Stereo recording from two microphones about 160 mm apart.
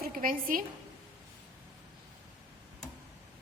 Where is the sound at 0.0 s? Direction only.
65° right (ahead or behind).